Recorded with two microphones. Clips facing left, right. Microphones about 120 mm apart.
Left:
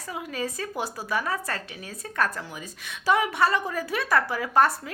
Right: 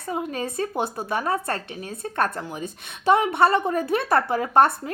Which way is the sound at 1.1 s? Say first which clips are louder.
Right 3 dB; 30° right (ahead or behind).